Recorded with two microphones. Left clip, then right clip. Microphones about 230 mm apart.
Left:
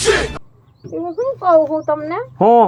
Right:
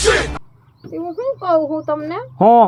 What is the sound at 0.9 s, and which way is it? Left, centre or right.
Speech, right.